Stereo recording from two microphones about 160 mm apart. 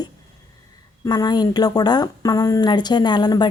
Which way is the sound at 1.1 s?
25° left (ahead or behind).